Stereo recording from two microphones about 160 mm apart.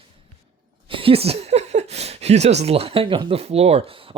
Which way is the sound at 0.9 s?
35° right (ahead or behind).